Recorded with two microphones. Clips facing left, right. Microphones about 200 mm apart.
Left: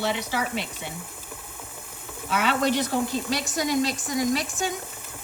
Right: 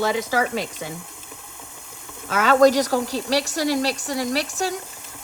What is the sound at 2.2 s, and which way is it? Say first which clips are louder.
Speech: right 8 dB; 45° right (ahead or behind).